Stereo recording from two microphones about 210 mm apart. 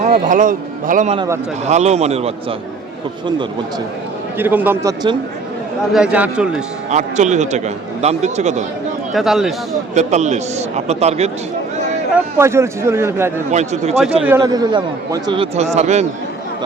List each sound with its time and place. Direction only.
0.0 s a man's voice: 35° right (ahead or behind)
4.4 s a man's voice: 10° right (ahead or behind)
6.9 s a man's voice: 35° right (ahead or behind)
9.1 s a man's voice: centre (ahead or behind)
9.9 s a man's voice: 35° right (ahead or behind)
12.1 s speech: 10° right (ahead or behind)
13.5 s a man's voice: 35° right (ahead or behind)
14.2 s a man's voice: 10° right (ahead or behind); by 16.0 s 30° right (ahead or behind)